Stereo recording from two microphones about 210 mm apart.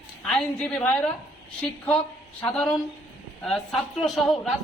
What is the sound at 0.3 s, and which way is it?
A woman's voice, centre (ahead or behind).